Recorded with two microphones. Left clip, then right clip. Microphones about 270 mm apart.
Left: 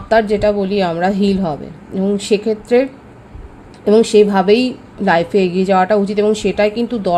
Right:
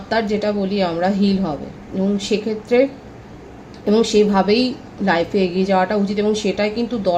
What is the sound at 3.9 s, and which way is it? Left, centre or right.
A woman's voice, left.